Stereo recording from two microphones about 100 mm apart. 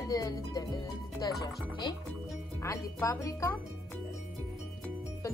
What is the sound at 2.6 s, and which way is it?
Speech, 35° left (ahead or behind).